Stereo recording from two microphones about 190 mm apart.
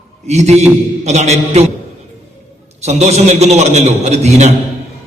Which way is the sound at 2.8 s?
35° right (ahead or behind).